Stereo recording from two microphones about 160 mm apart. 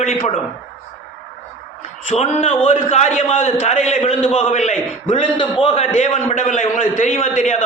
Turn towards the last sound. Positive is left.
turn(degrees=45)  # may be behind; listen again after turning